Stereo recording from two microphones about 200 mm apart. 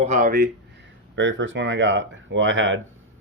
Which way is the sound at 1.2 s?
65° right (ahead or behind).